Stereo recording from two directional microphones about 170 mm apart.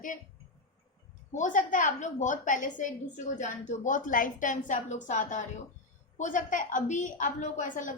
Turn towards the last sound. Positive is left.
turn(degrees=50)  # may be behind; listen again after turning